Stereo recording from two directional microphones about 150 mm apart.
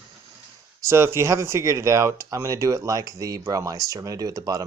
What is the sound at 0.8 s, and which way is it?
Speech, 15° right (ahead or behind).